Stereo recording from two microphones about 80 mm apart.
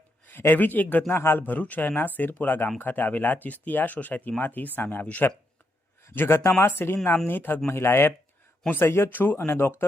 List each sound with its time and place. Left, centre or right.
0.3 s speech: left